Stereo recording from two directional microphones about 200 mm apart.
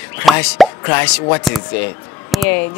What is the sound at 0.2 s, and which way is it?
Speech, centre (ahead or behind).